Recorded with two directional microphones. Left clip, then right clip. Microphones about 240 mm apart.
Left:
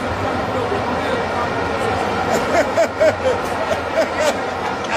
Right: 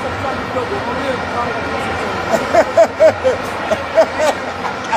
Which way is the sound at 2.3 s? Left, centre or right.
Right.